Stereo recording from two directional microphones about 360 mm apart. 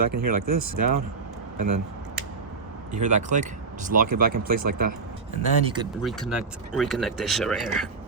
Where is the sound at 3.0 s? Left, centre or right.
Centre.